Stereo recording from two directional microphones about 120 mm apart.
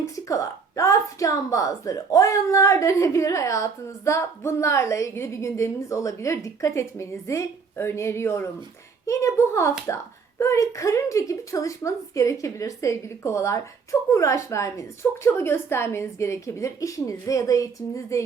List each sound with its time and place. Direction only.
0.0 s a woman's voice: 25° left (ahead or behind)